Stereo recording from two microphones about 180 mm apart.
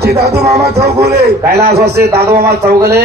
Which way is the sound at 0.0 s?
65° right (ahead or behind).